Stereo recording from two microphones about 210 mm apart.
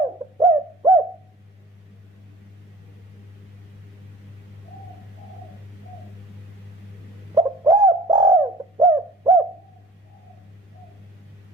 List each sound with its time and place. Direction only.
0.3 s bird: 15° right (ahead or behind)
7.3 s bird: 20° right (ahead or behind)